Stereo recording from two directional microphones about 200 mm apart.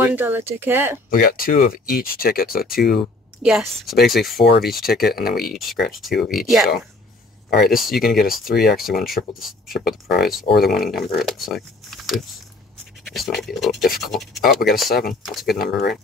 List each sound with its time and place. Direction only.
0.0 s speech: 10° right (ahead or behind)
1.1 s speech: 45° left (ahead or behind)
3.4 s speech: centre (ahead or behind)
4.5 s speech: 50° left (ahead or behind)
5.6 s speech: centre (ahead or behind)
7.4 s speech: 50° left (ahead or behind)
8.8 s speech: centre (ahead or behind)
9.8 s speech: 50° left (ahead or behind)
10.6 s speech: centre (ahead or behind)
14.4 s speech: 50° left (ahead or behind)
15.2 s speech: centre (ahead or behind)